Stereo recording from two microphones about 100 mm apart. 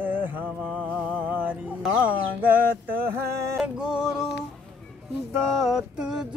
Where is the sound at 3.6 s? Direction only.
10° right (ahead or behind).